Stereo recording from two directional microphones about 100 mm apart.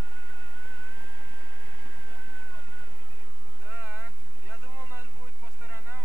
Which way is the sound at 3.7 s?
20° right (ahead or behind).